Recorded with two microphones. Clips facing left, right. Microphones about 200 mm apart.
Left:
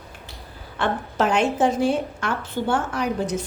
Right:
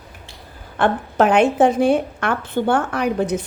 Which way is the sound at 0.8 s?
55° right (ahead or behind).